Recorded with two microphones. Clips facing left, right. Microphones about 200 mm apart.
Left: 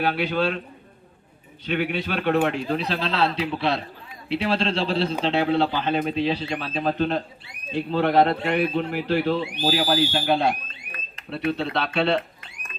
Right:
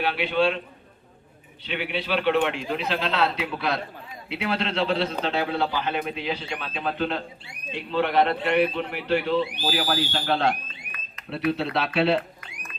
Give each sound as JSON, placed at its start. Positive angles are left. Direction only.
{"t": 0.0, "sound": "speech", "side_deg": 40}
{"t": 1.6, "sound": "speech", "side_deg": 45}
{"t": 10.1, "sound": "speech", "side_deg": 15}
{"t": 11.5, "sound": "speech", "side_deg": -5}